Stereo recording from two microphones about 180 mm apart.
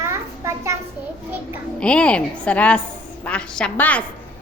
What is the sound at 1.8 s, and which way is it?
A woman's voice, 5° left (ahead or behind).